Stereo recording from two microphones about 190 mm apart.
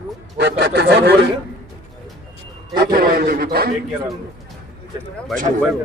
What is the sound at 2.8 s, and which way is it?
Speech, 50° right (ahead or behind).